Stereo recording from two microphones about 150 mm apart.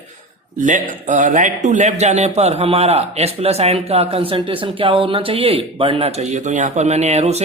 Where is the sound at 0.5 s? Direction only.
60° right (ahead or behind).